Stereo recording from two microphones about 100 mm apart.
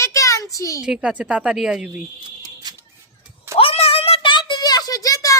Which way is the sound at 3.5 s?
75° left (ahead or behind).